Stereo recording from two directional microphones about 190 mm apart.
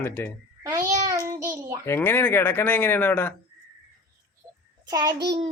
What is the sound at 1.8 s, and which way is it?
Speech, 10° left (ahead or behind).